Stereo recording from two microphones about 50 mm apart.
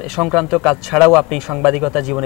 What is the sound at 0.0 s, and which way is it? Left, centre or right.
Speech, centre.